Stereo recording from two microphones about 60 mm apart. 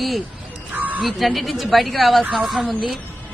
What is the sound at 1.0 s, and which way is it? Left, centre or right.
A man's voice, centre.